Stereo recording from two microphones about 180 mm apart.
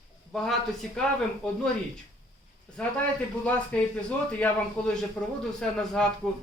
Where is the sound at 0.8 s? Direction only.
5° left (ahead or behind).